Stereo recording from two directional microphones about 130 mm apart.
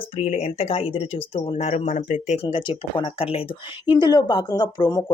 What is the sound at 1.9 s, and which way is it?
Speech, 75° left (ahead or behind).